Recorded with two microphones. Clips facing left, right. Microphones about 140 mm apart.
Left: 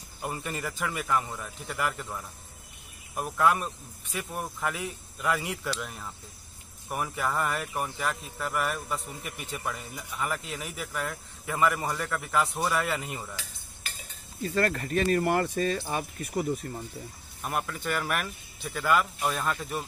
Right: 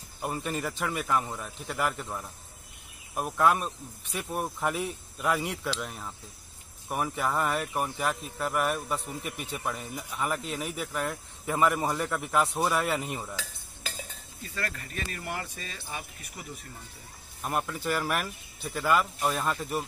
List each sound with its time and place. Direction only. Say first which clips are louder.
0.2 s speech: right 2 dB; 5° right (ahead or behind)
14.4 s speech: left 10 dB; 45° left (ahead or behind)
17.4 s speech: right 1 dB; centre (ahead or behind)